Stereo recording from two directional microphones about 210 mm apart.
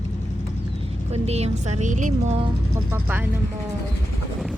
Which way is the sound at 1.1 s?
30° right (ahead or behind).